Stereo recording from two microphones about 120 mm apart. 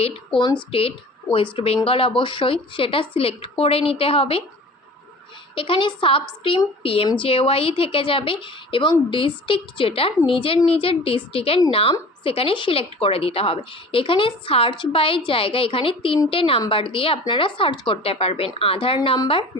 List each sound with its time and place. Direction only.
0.3 s a woman's voice: 35° left (ahead or behind)
0.7 s a woman's voice: 50° left (ahead or behind)
5.5 s a woman's voice: 45° left (ahead or behind)